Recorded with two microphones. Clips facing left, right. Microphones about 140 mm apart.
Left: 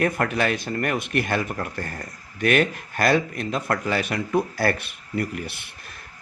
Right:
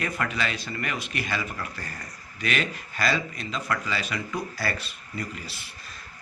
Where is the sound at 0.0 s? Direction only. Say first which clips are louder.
Left 7 dB; 55° left (ahead or behind).